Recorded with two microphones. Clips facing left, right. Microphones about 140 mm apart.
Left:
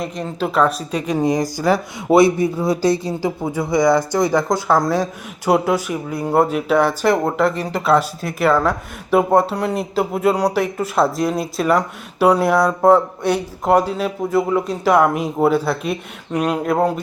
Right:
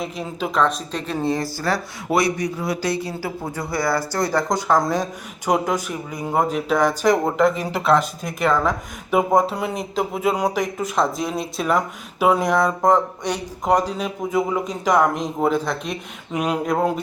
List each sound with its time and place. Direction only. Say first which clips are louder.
0.0 s speech: left 3 dB; centre (ahead or behind); by 4.4 s 15° left (ahead or behind)
4.4 s speech: left 2 dB; 5° left (ahead or behind)